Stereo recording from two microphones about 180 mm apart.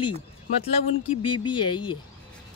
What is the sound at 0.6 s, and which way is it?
Speech, 35° left (ahead or behind).